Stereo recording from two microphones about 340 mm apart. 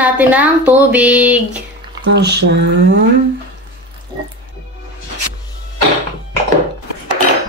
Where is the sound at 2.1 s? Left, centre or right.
Right.